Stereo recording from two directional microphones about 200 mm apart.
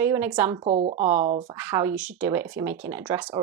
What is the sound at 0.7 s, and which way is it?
Speech, 35° right (ahead or behind).